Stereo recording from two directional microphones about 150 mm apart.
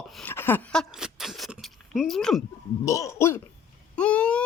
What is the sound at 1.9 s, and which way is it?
Speech, centre (ahead or behind).